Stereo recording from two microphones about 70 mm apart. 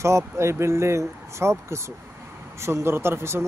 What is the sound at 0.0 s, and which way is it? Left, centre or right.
Speech, right.